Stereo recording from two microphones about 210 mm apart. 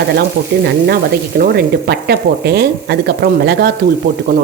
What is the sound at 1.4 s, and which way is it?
Speech, 50° right (ahead or behind).